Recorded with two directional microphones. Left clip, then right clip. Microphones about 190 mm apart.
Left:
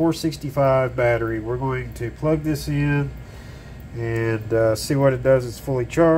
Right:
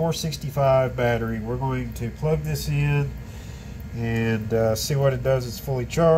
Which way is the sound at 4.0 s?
30° left (ahead or behind).